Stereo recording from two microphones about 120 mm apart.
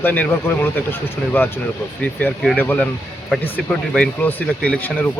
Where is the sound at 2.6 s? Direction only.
15° left (ahead or behind).